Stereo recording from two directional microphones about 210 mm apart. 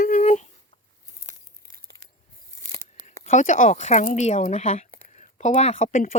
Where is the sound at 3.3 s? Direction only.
35° left (ahead or behind).